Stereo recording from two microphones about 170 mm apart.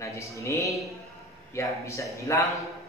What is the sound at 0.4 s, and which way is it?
A man's voice, 20° left (ahead or behind).